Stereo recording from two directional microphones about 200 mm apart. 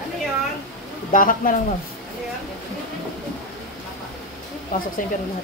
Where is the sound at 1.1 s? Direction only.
45° left (ahead or behind).